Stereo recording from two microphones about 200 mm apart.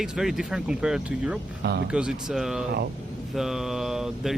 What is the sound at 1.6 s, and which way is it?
Speech, 55° right (ahead or behind).